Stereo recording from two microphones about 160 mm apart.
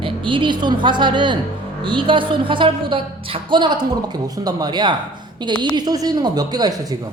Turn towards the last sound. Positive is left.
turn(degrees=-20)  # may be behind; listen again after turning